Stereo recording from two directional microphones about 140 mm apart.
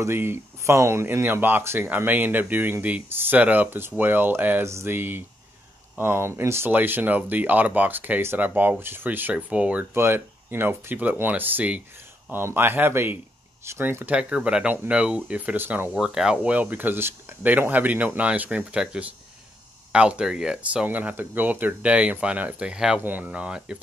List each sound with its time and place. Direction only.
0.0 s speech: 15° right (ahead or behind)